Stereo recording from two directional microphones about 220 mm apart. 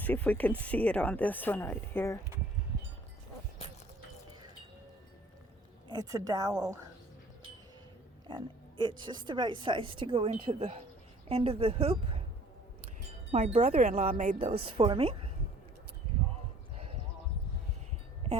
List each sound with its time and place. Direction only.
0.0 s speech: 5° left (ahead or behind)
5.9 s a woman's voice: 15° right (ahead or behind)
8.3 s a woman's voice: 20° right (ahead or behind)
13.3 s speech: 30° right (ahead or behind)